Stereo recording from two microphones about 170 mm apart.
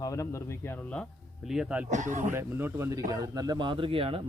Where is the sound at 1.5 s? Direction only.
5° right (ahead or behind).